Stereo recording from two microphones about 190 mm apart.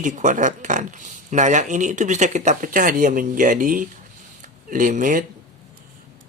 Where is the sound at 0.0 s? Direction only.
40° right (ahead or behind).